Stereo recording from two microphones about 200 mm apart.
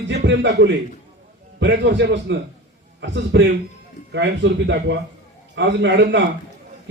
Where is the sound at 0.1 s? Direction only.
60° right (ahead or behind).